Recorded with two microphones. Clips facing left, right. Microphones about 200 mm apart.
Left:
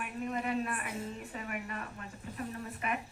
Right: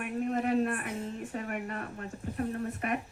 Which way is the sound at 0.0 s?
50° right (ahead or behind).